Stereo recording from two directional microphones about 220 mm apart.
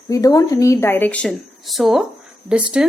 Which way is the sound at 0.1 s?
15° left (ahead or behind).